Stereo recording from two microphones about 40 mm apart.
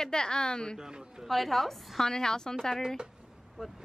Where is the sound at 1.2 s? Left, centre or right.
Centre.